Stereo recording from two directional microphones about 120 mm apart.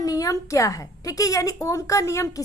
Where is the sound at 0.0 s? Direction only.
30° left (ahead or behind).